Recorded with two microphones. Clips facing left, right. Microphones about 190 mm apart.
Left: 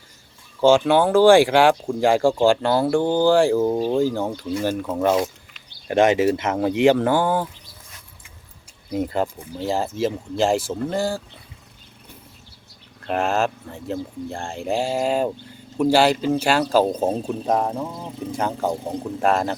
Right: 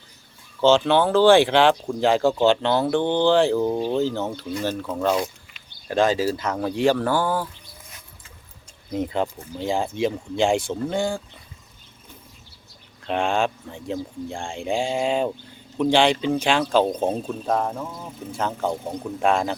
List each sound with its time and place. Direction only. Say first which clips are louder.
0.6 s speech: left 2 dB; 10° left (ahead or behind)
5.9 s speech: left 4 dB; 20° left (ahead or behind)
9.0 s speech: left 1 dB; 5° left (ahead or behind)
13.1 s speech: left 1 dB; 5° left (ahead or behind)
17.4 s speech: left 2 dB; 15° left (ahead or behind); by 19.5 s centre (ahead or behind)